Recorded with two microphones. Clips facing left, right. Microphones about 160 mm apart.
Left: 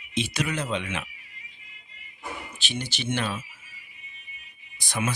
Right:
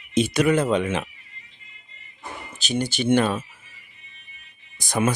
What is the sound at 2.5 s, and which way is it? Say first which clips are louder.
Speech: right 12 dB; 40° right (ahead or behind).